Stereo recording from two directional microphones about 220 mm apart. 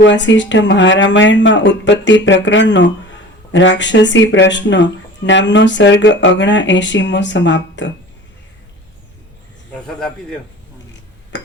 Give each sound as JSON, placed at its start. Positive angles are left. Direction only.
{"t": 0.0, "sound": "speech", "side_deg": 55}
{"t": 9.7, "sound": "speech", "side_deg": 5}